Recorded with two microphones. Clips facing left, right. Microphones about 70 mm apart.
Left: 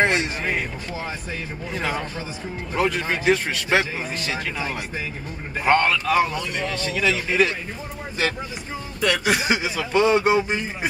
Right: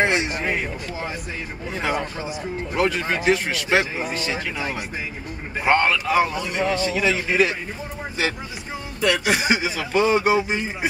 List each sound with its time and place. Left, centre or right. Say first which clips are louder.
0.0 s a man's voice: even; centre
1.8 s a man's voice: right 2 dB; centre
9.0 s a man's voice: right 1 dB; centre